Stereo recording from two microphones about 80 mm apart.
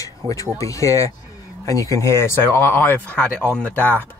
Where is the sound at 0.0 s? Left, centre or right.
Left; by 4.1 s centre.